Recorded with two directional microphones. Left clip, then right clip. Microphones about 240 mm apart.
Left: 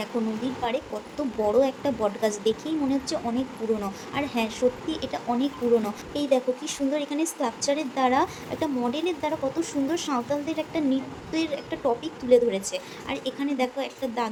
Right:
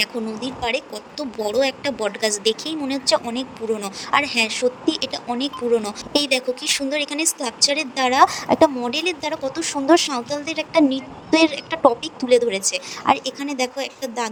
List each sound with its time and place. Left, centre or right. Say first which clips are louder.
0.0 s speech: right 5 dB; right